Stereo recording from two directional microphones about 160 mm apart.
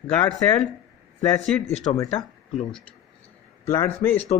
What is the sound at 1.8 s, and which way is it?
Speech, 20° left (ahead or behind).